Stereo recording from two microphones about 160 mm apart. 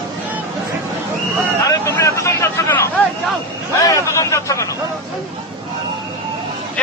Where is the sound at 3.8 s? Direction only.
20° left (ahead or behind).